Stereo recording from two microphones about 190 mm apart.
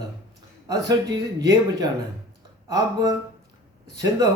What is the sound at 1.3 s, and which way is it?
A man's voice, 20° right (ahead or behind).